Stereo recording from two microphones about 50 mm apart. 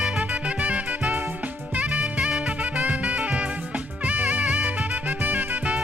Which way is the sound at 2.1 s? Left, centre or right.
Centre.